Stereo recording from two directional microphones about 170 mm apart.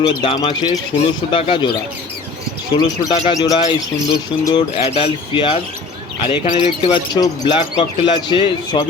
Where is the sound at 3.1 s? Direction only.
40° left (ahead or behind).